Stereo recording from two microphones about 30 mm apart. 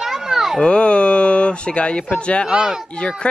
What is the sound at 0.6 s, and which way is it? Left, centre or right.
Speech, left.